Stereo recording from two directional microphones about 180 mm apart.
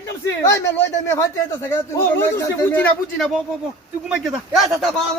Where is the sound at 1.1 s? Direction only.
15° left (ahead or behind).